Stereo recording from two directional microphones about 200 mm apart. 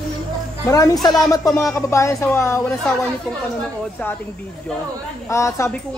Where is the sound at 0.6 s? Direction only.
15° left (ahead or behind).